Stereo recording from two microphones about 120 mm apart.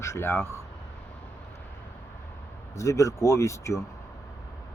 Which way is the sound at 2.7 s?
25° left (ahead or behind).